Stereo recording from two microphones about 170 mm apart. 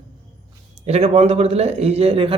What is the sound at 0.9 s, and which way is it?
A man's voice, 40° right (ahead or behind).